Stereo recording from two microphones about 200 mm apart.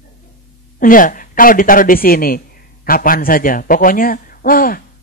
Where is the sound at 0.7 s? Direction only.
45° left (ahead or behind).